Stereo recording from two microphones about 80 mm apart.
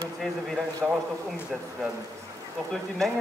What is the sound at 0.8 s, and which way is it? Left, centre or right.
Speech, centre.